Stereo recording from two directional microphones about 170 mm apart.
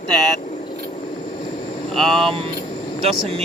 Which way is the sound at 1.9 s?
Centre (ahead or behind).